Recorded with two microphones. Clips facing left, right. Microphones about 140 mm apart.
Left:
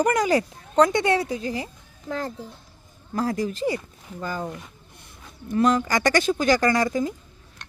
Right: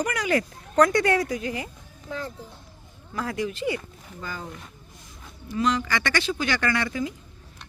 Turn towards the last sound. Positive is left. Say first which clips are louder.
# left 5 dB
turn(degrees=40)  # may be behind; listen again after turning